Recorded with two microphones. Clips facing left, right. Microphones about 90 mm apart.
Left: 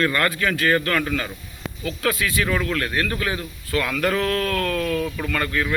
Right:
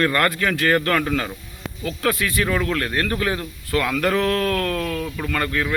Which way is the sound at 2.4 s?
30° right (ahead or behind).